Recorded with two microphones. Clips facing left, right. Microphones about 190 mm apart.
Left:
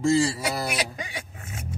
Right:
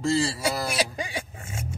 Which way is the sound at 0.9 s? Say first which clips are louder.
Right 4 dB; 30° right (ahead or behind).